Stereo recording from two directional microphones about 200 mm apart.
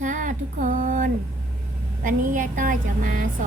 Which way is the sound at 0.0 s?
40° right (ahead or behind).